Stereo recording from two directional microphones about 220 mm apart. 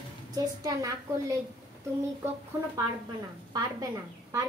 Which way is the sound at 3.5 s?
15° right (ahead or behind).